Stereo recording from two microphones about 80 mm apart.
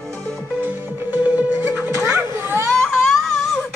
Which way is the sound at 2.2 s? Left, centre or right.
Right.